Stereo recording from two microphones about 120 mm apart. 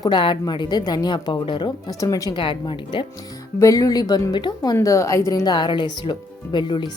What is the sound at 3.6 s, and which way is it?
A woman's voice, 30° left (ahead or behind).